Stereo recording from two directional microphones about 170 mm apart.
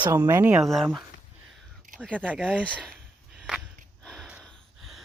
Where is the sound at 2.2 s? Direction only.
10° right (ahead or behind).